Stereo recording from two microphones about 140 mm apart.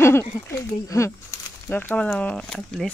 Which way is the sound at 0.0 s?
20° left (ahead or behind).